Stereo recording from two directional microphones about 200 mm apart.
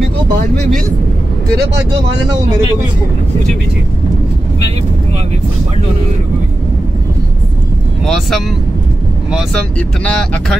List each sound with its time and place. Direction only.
8.0 s speech: centre (ahead or behind)